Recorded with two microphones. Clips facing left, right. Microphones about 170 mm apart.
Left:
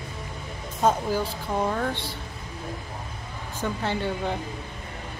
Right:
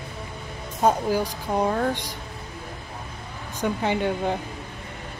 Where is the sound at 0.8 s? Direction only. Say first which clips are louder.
Right 2 dB; 10° right (ahead or behind).